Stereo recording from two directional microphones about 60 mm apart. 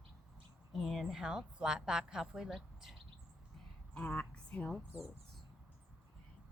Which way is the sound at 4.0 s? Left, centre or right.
Left.